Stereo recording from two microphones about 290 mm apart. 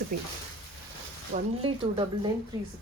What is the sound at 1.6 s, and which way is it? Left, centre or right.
Speech, centre.